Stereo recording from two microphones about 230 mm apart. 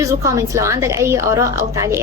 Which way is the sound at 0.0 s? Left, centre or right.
Centre.